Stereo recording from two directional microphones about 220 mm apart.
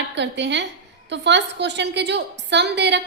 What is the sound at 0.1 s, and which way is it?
A woman's voice, 55° right (ahead or behind).